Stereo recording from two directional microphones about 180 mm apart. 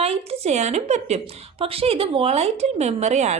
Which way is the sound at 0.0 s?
35° right (ahead or behind).